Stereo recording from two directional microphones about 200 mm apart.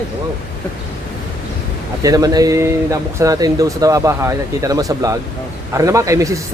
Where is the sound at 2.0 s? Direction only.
20° right (ahead or behind).